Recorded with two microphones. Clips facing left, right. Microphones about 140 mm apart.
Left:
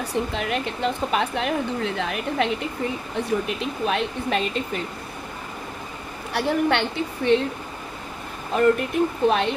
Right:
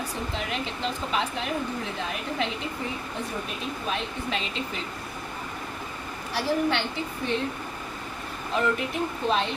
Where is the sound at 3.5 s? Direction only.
70° left (ahead or behind).